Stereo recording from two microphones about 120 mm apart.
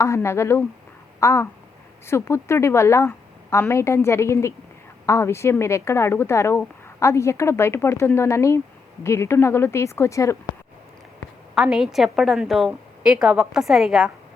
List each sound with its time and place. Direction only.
0.0 s a woman's voice: 25° left (ahead or behind)
11.5 s a woman's voice: 5° right (ahead or behind)